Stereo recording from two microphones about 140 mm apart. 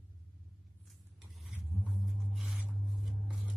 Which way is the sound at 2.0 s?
Centre (ahead or behind).